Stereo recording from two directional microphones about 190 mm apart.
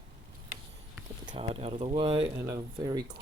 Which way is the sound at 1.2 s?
30° right (ahead or behind).